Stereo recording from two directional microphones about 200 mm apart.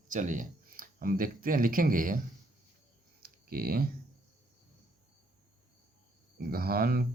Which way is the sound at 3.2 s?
50° right (ahead or behind).